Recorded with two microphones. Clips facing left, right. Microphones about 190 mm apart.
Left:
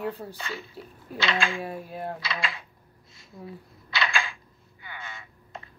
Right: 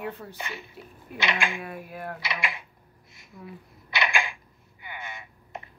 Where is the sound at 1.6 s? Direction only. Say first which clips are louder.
Left 3 dB; 30° left (ahead or behind).